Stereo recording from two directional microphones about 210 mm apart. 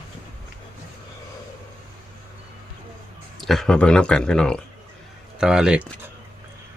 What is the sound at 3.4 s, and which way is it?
Speech, centre (ahead or behind).